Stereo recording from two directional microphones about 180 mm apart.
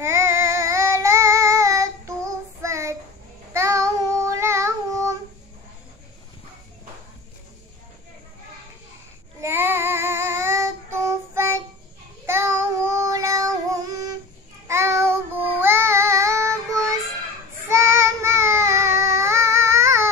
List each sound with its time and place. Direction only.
0.0 s child singing: 15° right (ahead or behind)
9.4 s child singing: 15° right (ahead or behind)
17.6 s child singing: 15° right (ahead or behind)